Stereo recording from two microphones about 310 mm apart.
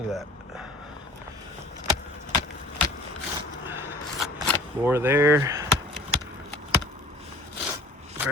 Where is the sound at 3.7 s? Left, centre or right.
Centre.